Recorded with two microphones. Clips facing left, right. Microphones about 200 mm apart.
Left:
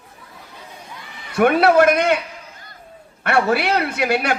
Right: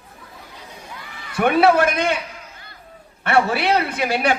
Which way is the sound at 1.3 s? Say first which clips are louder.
Left 2 dB; 60° left (ahead or behind).